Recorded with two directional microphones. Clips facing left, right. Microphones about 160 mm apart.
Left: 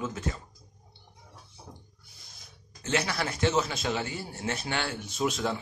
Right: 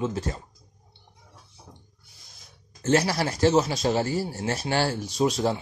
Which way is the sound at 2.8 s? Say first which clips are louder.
Right 7 dB; 40° right (ahead or behind).